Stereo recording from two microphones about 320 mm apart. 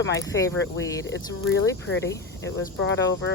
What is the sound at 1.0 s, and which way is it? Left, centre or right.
Speech, left.